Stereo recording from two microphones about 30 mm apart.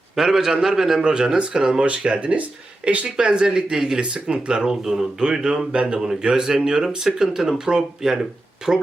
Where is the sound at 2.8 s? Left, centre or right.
Right.